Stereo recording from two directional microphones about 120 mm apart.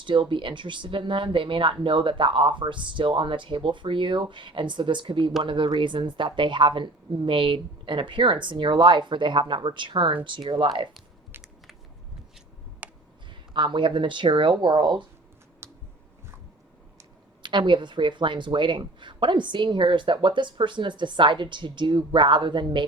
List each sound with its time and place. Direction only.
0.0 s speech: 40° right (ahead or behind)
12.8 s tick: 15° right (ahead or behind)
13.5 s a woman's voice: 40° right (ahead or behind)
15.6 s a sound: 20° right (ahead or behind)
17.4 s a woman's voice: 40° right (ahead or behind)